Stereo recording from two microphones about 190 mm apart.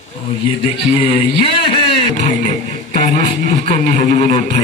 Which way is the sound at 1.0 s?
25° left (ahead or behind).